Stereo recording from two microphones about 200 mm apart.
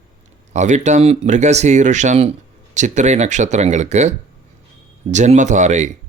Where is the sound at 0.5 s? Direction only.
35° right (ahead or behind).